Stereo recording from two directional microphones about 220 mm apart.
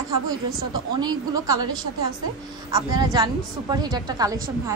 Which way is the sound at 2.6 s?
15° right (ahead or behind).